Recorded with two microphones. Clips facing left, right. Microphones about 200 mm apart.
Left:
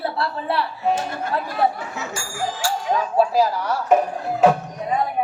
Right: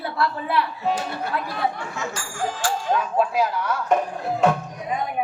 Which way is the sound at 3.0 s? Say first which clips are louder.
Left 6 dB; 35° left (ahead or behind).